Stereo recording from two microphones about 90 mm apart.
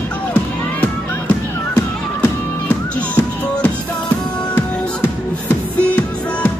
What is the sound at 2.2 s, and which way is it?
Music, 15° left (ahead or behind).